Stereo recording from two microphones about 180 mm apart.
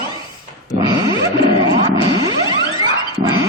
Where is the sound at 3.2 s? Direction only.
20° right (ahead or behind).